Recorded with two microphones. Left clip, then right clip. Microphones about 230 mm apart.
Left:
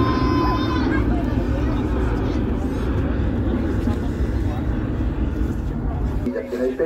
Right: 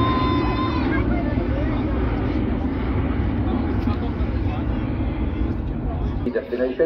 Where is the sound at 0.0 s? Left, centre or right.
Centre.